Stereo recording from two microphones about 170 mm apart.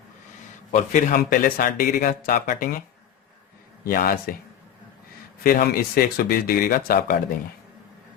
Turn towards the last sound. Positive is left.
turn(degrees=60)  # may be behind; listen again after turning